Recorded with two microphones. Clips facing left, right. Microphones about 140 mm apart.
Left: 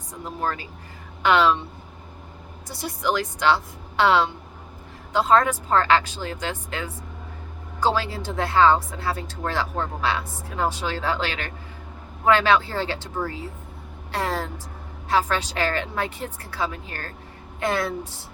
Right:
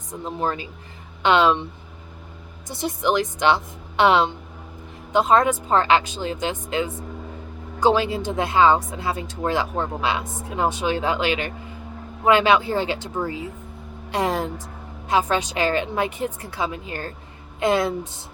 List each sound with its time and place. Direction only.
0.1 s speech: 20° right (ahead or behind)
2.6 s speech: 20° right (ahead or behind)